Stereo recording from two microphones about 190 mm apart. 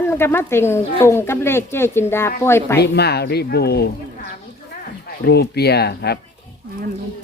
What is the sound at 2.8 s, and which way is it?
A woman's voice, 60° left (ahead or behind).